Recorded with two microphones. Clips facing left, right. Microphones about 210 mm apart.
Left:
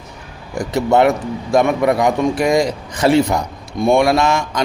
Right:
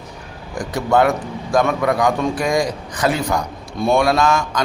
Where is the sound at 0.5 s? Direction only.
25° left (ahead or behind).